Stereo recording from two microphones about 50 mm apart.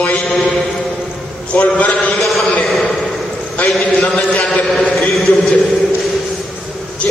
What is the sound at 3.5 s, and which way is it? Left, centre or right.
A man's voice, left.